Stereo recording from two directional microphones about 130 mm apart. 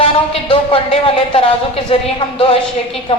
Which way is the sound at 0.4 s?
45° left (ahead or behind).